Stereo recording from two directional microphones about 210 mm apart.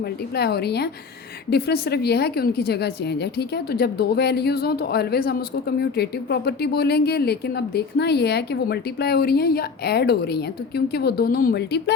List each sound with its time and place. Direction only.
0.0 s a woman's voice: 50° left (ahead or behind)